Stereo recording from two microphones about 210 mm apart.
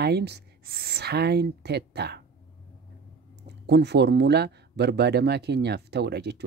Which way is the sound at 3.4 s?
55° right (ahead or behind).